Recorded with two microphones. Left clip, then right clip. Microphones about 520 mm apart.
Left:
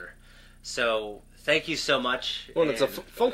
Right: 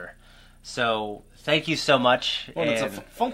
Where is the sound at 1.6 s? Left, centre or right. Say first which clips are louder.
Right 6 dB; right.